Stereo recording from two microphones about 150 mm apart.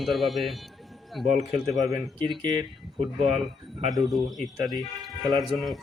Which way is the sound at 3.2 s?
40° right (ahead or behind).